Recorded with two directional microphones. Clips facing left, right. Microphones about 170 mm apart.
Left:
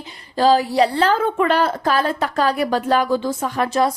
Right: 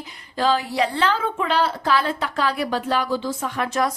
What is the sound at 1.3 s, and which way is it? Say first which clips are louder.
Speech: left 4 dB; 55° left (ahead or behind).